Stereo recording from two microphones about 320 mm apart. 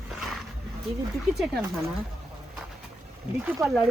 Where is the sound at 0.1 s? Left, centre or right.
Centre.